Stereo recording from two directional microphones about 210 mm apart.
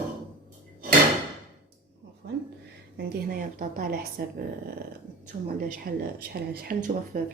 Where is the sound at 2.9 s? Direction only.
50° right (ahead or behind).